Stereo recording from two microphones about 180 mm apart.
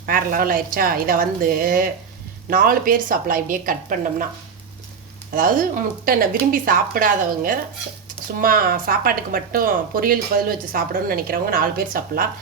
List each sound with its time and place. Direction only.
0.0 s speech: 50° right (ahead or behind)
5.3 s speech: 50° right (ahead or behind)